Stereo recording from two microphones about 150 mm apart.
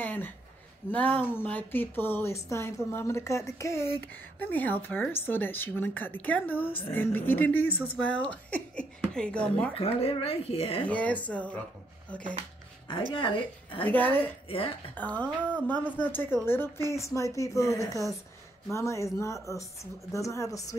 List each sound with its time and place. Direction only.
0.0 s a sound: 10° left (ahead or behind)
0.9 s speech: 10° left (ahead or behind)
9.8 s speech: 40° left (ahead or behind)
10.9 s speech: 10° left (ahead or behind)
12.8 s a woman's voice: 30° left (ahead or behind)
13.8 s speech: 10° left (ahead or behind)